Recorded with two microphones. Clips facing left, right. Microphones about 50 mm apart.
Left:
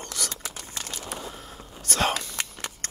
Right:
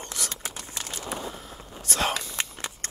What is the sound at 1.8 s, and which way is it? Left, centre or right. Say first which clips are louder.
Whispering: left 2 dB; left.